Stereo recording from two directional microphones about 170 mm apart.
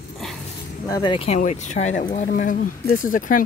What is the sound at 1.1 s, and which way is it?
Speech, 40° left (ahead or behind).